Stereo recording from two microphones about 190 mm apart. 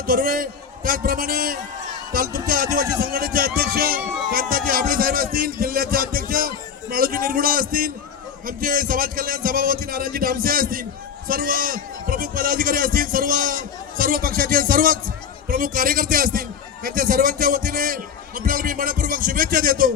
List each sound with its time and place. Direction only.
0.0 s a man's voice: 50° right (ahead or behind)